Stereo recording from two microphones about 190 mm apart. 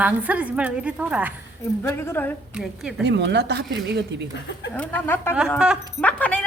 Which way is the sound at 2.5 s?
5° right (ahead or behind).